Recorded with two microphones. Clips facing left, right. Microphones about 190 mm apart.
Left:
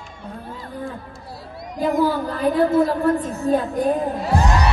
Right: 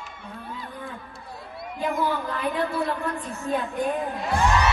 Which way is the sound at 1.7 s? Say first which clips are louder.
Left 7 dB; 40° left (ahead or behind).